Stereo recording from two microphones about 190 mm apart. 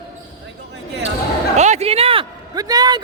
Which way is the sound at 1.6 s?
35° right (ahead or behind).